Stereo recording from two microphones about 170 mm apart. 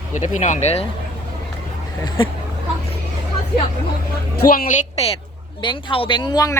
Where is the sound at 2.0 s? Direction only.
30° left (ahead or behind).